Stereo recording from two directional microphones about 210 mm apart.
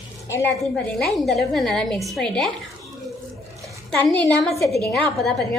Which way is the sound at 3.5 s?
15° right (ahead or behind).